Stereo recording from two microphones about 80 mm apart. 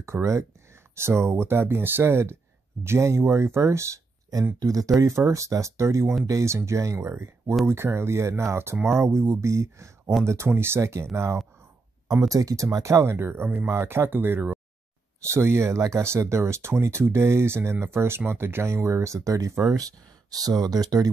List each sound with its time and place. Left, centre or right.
0.0 s speech: right
12.1 s speech: right